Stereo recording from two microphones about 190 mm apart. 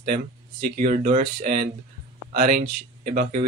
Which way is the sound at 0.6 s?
45° right (ahead or behind).